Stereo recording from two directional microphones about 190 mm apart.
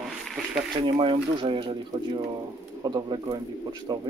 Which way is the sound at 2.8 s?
20° right (ahead or behind).